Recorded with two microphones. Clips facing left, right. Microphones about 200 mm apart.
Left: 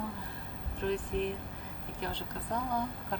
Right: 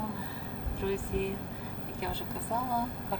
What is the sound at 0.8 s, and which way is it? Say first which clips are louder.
A woman's voice: right 1 dB; 10° right (ahead or behind).